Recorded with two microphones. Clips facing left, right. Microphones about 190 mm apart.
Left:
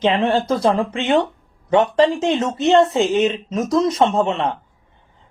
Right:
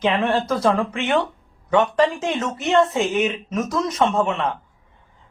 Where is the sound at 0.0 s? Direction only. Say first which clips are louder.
Left 3 dB; 25° left (ahead or behind).